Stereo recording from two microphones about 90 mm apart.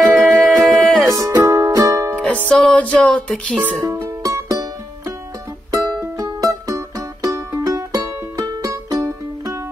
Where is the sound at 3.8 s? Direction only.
40° right (ahead or behind).